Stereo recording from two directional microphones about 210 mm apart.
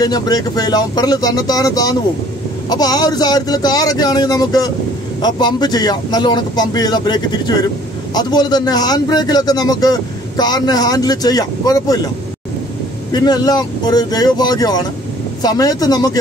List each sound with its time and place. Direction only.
0.0 s a man's voice: 20° left (ahead or behind)
13.1 s a man's voice: 20° left (ahead or behind)